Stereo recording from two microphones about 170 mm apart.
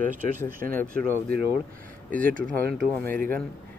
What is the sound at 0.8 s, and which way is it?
Speech, 10° left (ahead or behind).